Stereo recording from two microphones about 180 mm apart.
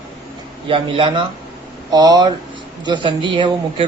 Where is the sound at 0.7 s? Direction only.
30° right (ahead or behind).